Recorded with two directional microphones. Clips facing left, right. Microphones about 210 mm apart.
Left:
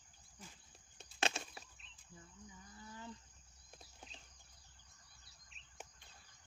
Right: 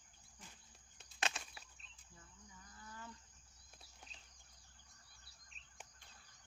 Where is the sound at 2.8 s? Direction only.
20° left (ahead or behind).